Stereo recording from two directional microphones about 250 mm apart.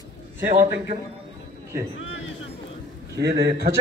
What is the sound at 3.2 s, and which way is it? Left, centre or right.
Speech, right.